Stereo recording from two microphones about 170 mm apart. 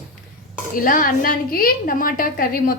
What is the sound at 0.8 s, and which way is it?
A woman's voice, 55° left (ahead or behind).